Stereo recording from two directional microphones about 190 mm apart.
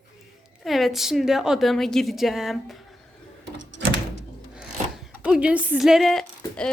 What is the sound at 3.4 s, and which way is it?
Door, 70° right (ahead or behind).